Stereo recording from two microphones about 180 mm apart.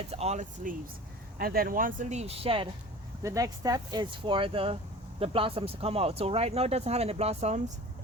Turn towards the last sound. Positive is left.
turn(degrees=-40)  # may be behind; listen again after turning